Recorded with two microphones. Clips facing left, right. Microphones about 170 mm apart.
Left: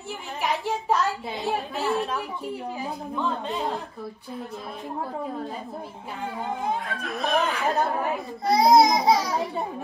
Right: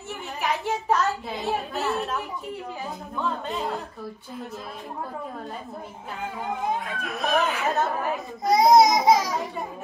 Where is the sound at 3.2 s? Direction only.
Centre (ahead or behind).